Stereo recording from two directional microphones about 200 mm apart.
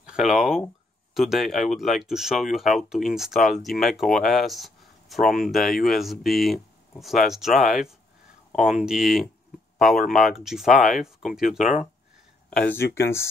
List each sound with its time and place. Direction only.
0.0 s speech: 5° right (ahead or behind)
5.2 s speech: 45° left (ahead or behind)
5.5 s speech: centre (ahead or behind)